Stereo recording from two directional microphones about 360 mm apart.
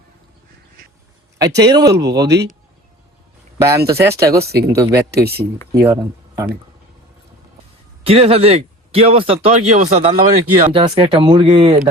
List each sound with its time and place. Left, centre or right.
1.4 s speech: centre
2.1 s speech: right
3.6 s speech: centre
4.9 s speech: right
5.7 s speech: centre
8.0 s speech: centre